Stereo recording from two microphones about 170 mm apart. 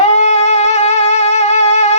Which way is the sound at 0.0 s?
40° left (ahead or behind).